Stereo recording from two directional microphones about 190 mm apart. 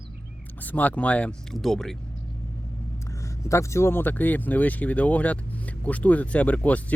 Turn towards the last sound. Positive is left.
turn(degrees=5)  # may be behind; listen again after turning